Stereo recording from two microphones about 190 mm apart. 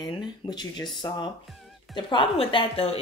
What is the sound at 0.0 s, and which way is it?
A woman's voice, 20° left (ahead or behind).